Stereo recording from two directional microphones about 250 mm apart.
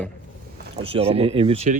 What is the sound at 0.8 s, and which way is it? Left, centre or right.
Speech, right.